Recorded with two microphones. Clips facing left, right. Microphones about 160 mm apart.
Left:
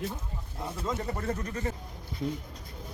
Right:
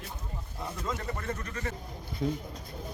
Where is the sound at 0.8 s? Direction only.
25° left (ahead or behind).